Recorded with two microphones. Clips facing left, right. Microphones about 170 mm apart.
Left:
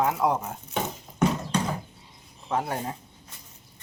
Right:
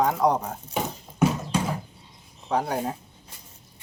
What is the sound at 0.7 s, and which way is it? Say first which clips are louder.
Horse: even; 5° right (ahead or behind).